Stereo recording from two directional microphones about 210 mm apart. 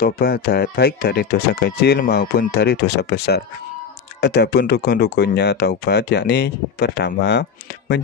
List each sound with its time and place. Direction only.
0.0 s speech: 45° left (ahead or behind)